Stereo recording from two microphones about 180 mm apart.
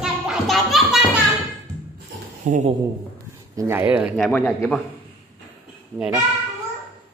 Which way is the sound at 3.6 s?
15° right (ahead or behind).